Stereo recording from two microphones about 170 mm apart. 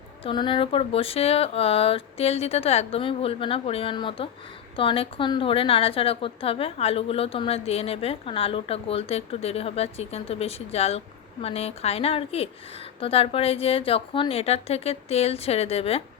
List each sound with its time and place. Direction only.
0.3 s a woman's voice: 30° left (ahead or behind)